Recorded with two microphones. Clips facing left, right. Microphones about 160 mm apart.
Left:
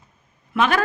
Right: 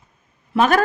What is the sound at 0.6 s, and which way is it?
Speech, 45° right (ahead or behind).